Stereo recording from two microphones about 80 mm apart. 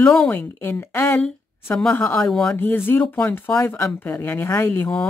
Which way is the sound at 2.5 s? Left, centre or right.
Left.